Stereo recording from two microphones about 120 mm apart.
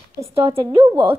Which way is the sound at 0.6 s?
35° right (ahead or behind).